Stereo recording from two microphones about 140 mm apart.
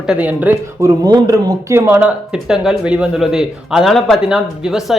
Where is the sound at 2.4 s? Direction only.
5° right (ahead or behind).